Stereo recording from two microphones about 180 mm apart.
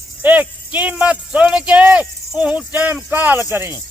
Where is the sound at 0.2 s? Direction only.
10° right (ahead or behind).